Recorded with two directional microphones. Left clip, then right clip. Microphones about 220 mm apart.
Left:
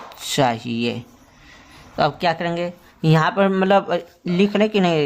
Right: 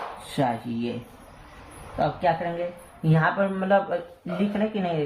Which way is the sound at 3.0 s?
45° left (ahead or behind).